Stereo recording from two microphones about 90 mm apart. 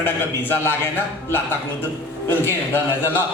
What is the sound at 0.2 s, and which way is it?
Speech, 25° left (ahead or behind).